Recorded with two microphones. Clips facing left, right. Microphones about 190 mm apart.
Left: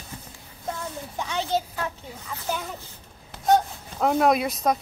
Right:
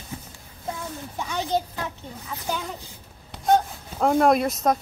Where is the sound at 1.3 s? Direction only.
15° right (ahead or behind).